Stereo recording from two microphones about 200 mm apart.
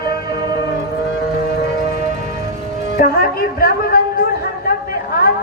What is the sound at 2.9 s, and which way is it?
Music, 45° left (ahead or behind).